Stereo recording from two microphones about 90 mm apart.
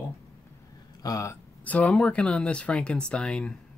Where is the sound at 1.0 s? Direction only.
40° left (ahead or behind).